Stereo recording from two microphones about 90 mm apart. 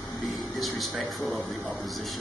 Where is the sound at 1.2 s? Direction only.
35° right (ahead or behind).